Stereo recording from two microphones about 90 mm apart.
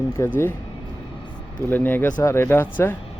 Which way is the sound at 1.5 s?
20° left (ahead or behind).